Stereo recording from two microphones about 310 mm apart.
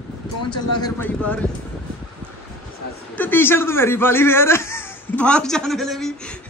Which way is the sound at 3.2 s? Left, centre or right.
Centre.